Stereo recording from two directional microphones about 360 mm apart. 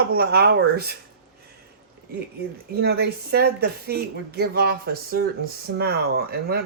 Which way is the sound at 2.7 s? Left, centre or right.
Right.